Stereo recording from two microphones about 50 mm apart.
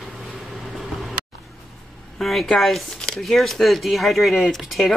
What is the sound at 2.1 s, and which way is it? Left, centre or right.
Speech, centre.